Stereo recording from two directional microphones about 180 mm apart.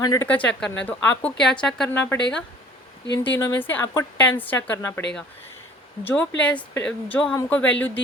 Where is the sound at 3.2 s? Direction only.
10° left (ahead or behind).